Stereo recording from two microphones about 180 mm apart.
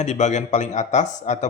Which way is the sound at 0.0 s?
40° left (ahead or behind).